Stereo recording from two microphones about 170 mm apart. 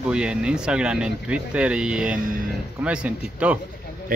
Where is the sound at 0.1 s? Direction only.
5° right (ahead or behind).